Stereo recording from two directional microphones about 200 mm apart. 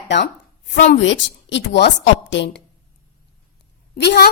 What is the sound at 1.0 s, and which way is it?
A woman's voice, 65° left (ahead or behind).